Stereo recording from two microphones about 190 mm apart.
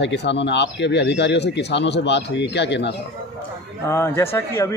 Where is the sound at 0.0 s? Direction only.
65° left (ahead or behind).